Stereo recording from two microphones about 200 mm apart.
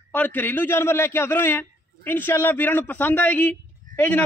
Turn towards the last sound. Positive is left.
turn(degrees=10)  # may be behind; listen again after turning